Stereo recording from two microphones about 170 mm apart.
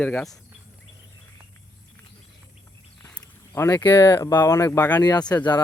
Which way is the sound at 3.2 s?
15° left (ahead or behind).